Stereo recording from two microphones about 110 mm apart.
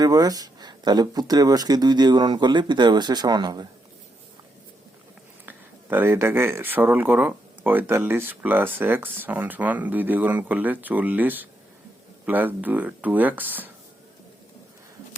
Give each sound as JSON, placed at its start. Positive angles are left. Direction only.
{"t": 0.0, "sound": "speech", "side_deg": -35}
{"t": 5.5, "sound": "speech", "side_deg": -15}